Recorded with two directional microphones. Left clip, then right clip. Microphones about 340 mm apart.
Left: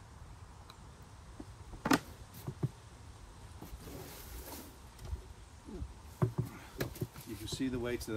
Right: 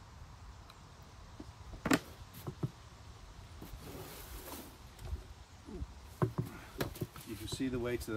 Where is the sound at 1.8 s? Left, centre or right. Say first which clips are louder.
Left 1 dB; centre.